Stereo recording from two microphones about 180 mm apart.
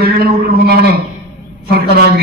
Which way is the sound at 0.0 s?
60° right (ahead or behind).